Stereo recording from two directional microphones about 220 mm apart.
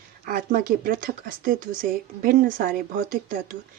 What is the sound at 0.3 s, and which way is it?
Speech, 40° right (ahead or behind).